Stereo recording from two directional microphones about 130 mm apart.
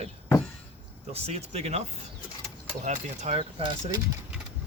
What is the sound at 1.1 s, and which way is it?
Speech, 50° right (ahead or behind).